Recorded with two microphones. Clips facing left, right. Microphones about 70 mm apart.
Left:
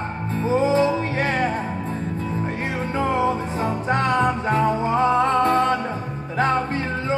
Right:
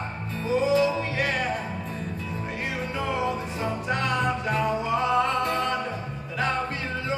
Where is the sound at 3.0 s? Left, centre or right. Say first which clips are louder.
Left 7 dB; left.